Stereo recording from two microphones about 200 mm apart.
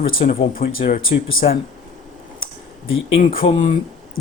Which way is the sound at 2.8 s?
80° left.